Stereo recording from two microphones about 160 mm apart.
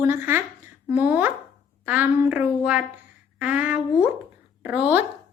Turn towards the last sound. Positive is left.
turn(degrees=-10)  # may be behind; listen again after turning